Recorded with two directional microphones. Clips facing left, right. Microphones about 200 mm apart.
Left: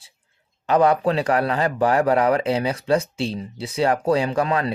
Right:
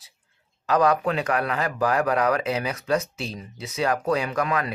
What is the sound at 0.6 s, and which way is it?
A man's voice, 30° left (ahead or behind).